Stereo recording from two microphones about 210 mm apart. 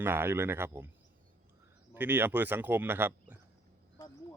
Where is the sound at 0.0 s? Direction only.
10° right (ahead or behind).